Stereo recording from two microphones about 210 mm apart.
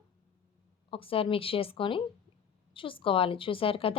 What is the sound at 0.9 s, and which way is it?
Speech, 25° left (ahead or behind).